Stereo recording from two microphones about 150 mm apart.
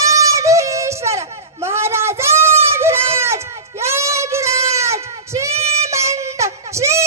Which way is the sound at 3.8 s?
20° right (ahead or behind).